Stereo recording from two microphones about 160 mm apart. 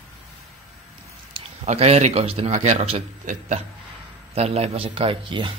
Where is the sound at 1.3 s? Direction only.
45° right (ahead or behind).